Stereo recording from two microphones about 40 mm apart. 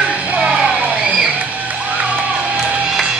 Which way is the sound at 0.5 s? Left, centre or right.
Right.